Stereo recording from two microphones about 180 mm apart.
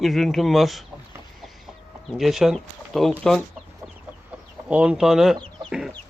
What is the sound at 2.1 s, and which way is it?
Speech, centre (ahead or behind).